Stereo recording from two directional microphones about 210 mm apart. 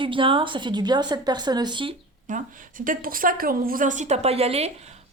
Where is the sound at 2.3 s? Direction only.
40° right (ahead or behind).